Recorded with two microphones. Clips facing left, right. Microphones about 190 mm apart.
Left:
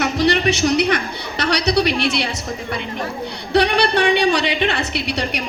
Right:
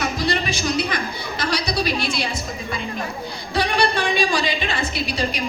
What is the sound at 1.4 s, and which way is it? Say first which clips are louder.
Speech: left 6 dB; 70° left (ahead or behind).